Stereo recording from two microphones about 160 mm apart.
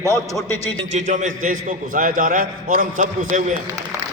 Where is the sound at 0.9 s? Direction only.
50° right (ahead or behind).